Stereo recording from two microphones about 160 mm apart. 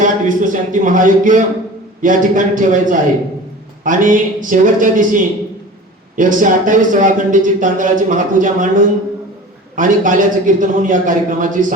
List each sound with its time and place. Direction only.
0.0 s a man's voice: 55° right (ahead or behind)